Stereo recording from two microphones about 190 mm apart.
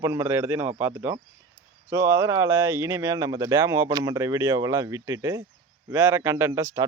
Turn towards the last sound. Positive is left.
turn(degrees=-15)  # may be behind; listen again after turning